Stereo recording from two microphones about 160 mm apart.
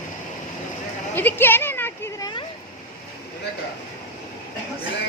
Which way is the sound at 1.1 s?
15° left (ahead or behind).